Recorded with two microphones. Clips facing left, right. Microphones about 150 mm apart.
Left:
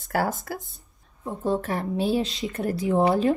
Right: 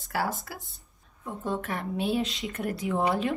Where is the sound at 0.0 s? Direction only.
45° left (ahead or behind).